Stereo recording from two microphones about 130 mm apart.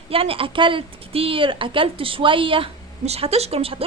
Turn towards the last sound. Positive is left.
turn(degrees=-50)  # may be behind; listen again after turning